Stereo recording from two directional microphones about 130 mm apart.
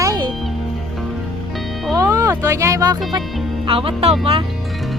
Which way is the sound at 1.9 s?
25° right (ahead or behind).